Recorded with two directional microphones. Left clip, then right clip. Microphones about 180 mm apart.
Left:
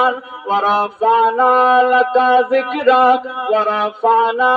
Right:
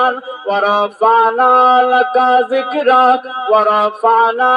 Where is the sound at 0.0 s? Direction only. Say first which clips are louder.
Right 2 dB; 35° right (ahead or behind).